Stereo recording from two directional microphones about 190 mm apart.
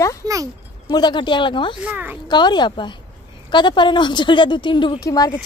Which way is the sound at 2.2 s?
25° left (ahead or behind).